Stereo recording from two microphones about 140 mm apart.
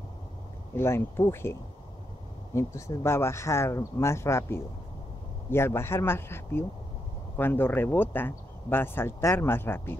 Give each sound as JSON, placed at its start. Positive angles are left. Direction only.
{"t": 0.7, "sound": "speech", "side_deg": 15}